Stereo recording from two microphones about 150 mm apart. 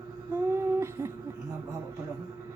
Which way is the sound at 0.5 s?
20° right (ahead or behind).